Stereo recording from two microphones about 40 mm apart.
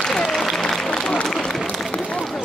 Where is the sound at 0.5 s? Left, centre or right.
Centre.